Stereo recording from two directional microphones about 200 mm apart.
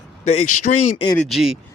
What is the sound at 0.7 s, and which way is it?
Speech, 40° left (ahead or behind).